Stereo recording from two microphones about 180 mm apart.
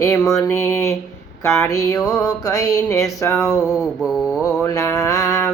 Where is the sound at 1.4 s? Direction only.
15° left (ahead or behind).